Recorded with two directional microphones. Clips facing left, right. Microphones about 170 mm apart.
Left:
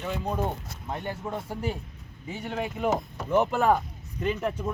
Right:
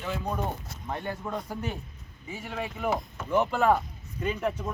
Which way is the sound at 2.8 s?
40° left (ahead or behind).